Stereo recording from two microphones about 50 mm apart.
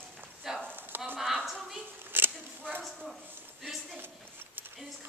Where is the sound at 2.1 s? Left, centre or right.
Right.